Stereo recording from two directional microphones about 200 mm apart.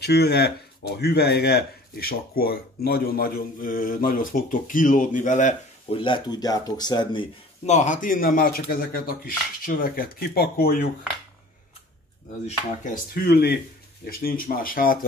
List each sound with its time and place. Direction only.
0.0 s speech: 55° left (ahead or behind); by 7.2 s 20° left (ahead or behind)
7.6 s speech: 35° left (ahead or behind); by 10.9 s 50° left (ahead or behind)
12.4 s speech: 40° left (ahead or behind)